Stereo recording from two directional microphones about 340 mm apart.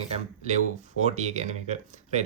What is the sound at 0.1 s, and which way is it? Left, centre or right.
Speech, centre.